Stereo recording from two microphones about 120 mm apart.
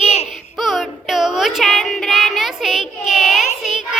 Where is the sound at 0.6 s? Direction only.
Centre (ahead or behind).